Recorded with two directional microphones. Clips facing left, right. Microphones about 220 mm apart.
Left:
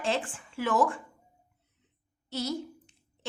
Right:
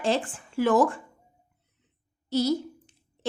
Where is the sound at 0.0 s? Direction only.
40° right (ahead or behind).